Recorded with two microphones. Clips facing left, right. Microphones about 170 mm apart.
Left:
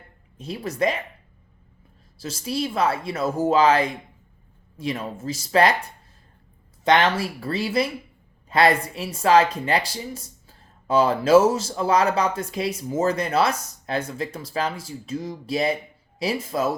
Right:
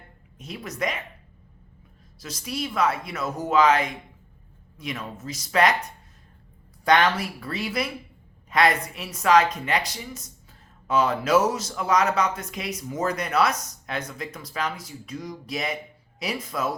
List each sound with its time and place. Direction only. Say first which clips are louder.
0.3 s speech: left 6 dB; 30° left (ahead or behind)
2.1 s speech: left 5 dB; 30° left (ahead or behind)
6.8 s speech: left 1 dB; 25° left (ahead or behind)